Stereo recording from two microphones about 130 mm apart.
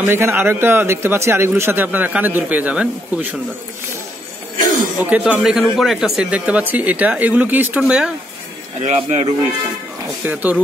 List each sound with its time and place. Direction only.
0.0 s a man's voice: 15° right (ahead or behind)
4.6 s a sound: 90° right
4.9 s a man's voice: 10° right (ahead or behind)
8.8 s speech: 55° right (ahead or behind)
10.2 s a man's voice: 10° right (ahead or behind)